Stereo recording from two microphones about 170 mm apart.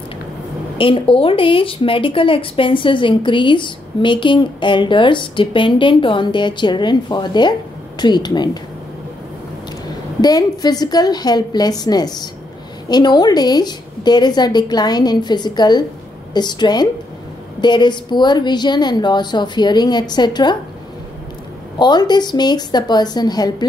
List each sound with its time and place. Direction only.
0.7 s speech: 30° left (ahead or behind)
10.2 s speech: 25° left (ahead or behind)
21.7 s speech: 25° left (ahead or behind)